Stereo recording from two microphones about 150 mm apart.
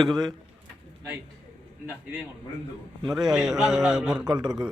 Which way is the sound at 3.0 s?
25° right (ahead or behind).